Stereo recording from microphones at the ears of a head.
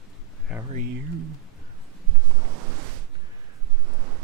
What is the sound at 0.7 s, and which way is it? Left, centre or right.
Speech, right.